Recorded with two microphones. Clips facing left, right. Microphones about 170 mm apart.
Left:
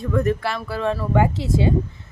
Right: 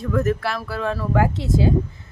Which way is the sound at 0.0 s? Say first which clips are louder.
Even; centre (ahead or behind).